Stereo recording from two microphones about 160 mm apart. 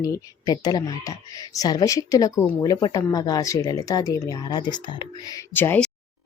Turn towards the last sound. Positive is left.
turn(degrees=15)  # may be behind; listen again after turning